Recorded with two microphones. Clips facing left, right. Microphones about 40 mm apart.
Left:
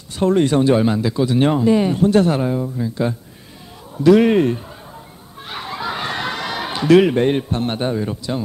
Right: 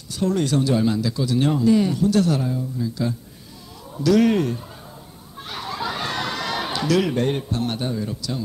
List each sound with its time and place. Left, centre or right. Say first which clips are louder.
0.1 s a man's voice: left 6 dB; left
6.9 s speech: left 9 dB; left